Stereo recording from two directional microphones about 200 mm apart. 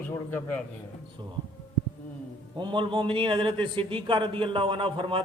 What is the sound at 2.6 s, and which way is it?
A man's voice, 25° right (ahead or behind).